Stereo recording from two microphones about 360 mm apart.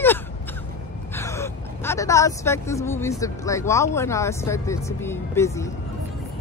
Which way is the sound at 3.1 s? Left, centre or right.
Centre.